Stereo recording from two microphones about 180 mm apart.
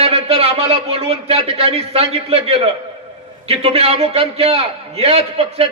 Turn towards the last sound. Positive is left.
turn(degrees=-35)  # may be behind; listen again after turning